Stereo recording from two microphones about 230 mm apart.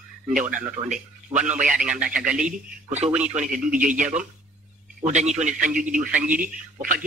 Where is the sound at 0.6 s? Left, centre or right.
Right.